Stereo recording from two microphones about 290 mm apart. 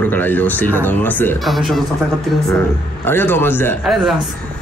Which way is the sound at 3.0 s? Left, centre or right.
Centre.